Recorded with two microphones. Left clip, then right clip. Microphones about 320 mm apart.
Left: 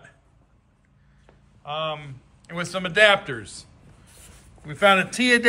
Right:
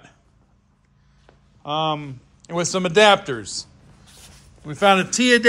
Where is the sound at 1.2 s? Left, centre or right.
Centre.